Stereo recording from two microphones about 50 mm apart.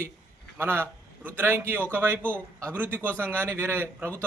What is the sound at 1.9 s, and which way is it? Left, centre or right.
A man's voice, right.